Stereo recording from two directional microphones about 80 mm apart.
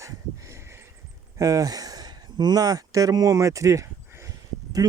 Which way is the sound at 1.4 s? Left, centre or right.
Right.